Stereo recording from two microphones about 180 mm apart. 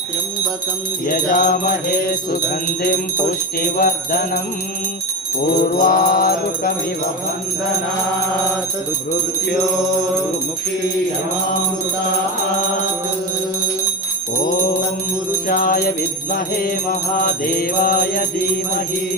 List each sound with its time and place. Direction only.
1.0 s jingle bell: 50° left (ahead or behind)
3.8 s music: 55° left (ahead or behind)
5.8 s music: 55° left (ahead or behind)
15.4 s jingle bell: 50° left (ahead or behind)
17.6 s jingle bell: 55° left (ahead or behind)